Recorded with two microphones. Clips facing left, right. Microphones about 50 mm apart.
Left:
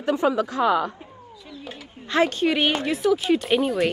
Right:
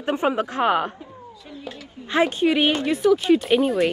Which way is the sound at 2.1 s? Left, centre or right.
Centre.